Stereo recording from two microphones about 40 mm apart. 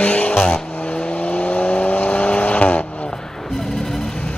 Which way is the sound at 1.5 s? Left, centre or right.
Left.